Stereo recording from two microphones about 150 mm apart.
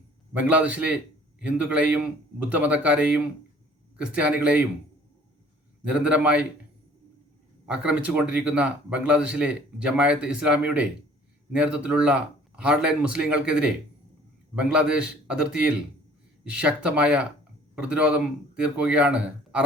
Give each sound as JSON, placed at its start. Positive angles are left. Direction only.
{"t": 0.3, "sound": "speech", "side_deg": -10}
{"t": 5.8, "sound": "speech", "side_deg": -5}
{"t": 7.7, "sound": "speech", "side_deg": -5}